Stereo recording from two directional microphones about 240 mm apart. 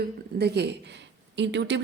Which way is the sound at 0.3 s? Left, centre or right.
Right.